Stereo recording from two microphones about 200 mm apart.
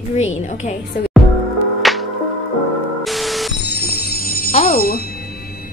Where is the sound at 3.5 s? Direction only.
50° left (ahead or behind).